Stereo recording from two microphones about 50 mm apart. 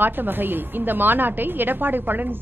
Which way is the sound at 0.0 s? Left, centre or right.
Right.